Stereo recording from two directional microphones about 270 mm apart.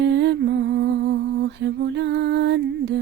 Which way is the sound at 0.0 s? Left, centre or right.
Right.